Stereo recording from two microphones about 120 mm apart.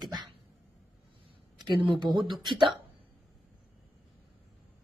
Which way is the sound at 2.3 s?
40° right (ahead or behind).